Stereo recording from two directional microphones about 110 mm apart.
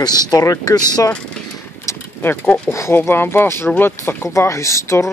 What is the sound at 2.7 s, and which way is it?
Speech, 25° left (ahead or behind).